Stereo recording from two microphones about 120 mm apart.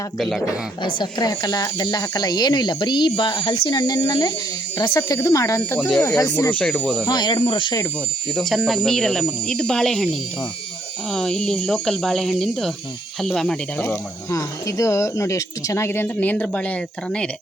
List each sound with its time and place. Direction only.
0.2 s speech: centre (ahead or behind)
0.4 s speech: 40° left (ahead or behind)
6.5 s speech: 10° left (ahead or behind)
7.0 s speech: 35° left (ahead or behind)
8.4 s speech: centre (ahead or behind)
11.1 s speech: 5° left (ahead or behind)
14.3 s speech: 25° left (ahead or behind); by 17.2 s 10° left (ahead or behind)